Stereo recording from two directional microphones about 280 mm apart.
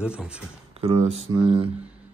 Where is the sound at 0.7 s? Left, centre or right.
Right.